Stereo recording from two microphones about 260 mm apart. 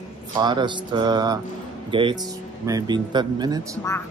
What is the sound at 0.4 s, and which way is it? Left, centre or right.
Speech, centre.